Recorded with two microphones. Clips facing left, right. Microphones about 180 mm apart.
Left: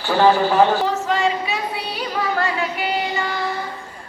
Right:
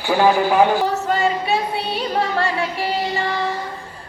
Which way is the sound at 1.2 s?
30° right (ahead or behind).